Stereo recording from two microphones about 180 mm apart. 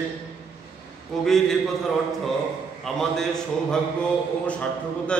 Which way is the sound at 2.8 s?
Centre (ahead or behind).